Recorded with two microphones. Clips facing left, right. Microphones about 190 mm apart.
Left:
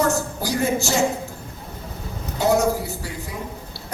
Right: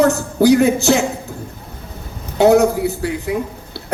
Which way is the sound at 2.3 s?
65° right (ahead or behind).